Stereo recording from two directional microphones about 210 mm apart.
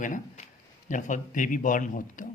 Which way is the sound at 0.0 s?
40° left (ahead or behind).